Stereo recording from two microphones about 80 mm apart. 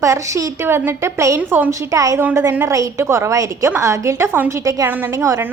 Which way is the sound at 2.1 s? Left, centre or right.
Right.